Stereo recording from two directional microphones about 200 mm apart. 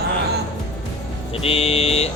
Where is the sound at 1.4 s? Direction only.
30° left (ahead or behind).